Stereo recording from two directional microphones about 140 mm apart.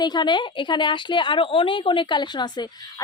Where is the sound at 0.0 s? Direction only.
30° left (ahead or behind).